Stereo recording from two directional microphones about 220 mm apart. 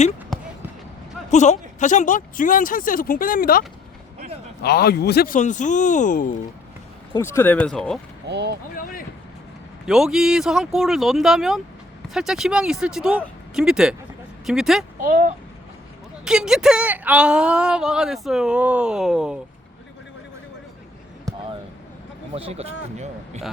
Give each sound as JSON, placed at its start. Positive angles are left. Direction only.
{"t": 0.3, "sound": "basketball bounce", "side_deg": 0}
{"t": 1.3, "sound": "speech", "side_deg": 30}
{"t": 7.1, "sound": "speech", "side_deg": 10}
{"t": 8.3, "sound": "speech", "side_deg": -50}
{"t": 8.7, "sound": "a sound", "side_deg": 40}
{"t": 9.8, "sound": "speech", "side_deg": 0}
{"t": 15.0, "sound": "a child's voice", "side_deg": -35}
{"t": 16.2, "sound": "speech", "side_deg": -5}
{"t": 22.4, "sound": "speech", "side_deg": -25}